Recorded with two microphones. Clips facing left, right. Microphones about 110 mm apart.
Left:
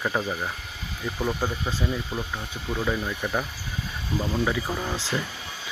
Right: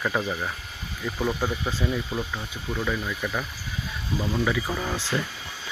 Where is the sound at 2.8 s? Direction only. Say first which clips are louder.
Left 1 dB; 30° left (ahead or behind).